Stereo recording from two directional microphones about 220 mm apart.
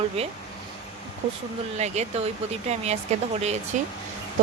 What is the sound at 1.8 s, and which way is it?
Speech, 30° right (ahead or behind).